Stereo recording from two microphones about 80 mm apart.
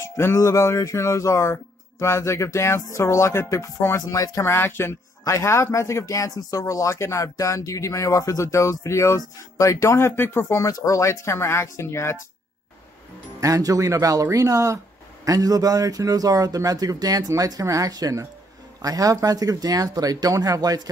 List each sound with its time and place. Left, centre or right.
0.0 s speech: left
5.2 s speech: left
10.5 s speech: left
13.4 s speech: right